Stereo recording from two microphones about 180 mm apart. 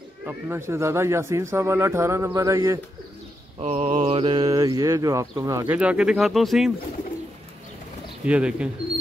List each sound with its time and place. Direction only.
0.2 s speech: 10° right (ahead or behind)
3.5 s speech: 35° right (ahead or behind); by 6.7 s centre (ahead or behind)
8.3 s speech: 5° right (ahead or behind)